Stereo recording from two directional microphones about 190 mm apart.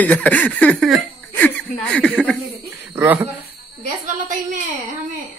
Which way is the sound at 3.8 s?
40° right (ahead or behind).